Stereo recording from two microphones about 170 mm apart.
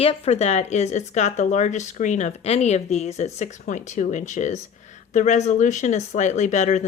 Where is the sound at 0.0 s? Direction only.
35° left (ahead or behind).